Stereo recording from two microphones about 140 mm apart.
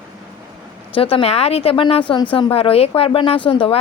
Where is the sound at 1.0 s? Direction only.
40° left (ahead or behind).